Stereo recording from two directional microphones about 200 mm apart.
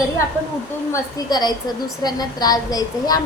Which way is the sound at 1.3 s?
20° left (ahead or behind).